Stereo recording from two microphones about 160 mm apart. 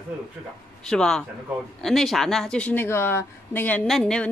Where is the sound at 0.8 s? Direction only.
5° left (ahead or behind).